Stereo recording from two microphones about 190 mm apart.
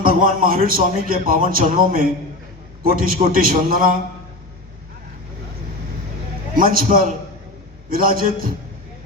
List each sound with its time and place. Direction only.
0.0 s a man's voice: 50° right (ahead or behind)
6.6 s a man's voice: 50° right (ahead or behind)